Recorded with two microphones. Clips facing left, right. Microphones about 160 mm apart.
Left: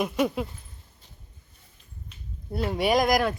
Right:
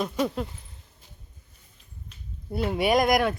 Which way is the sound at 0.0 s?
10° left (ahead or behind).